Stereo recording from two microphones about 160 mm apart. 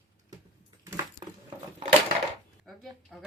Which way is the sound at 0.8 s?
20° right (ahead or behind).